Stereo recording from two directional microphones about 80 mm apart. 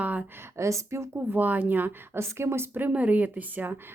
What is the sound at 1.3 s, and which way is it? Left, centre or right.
A woman's voice, right.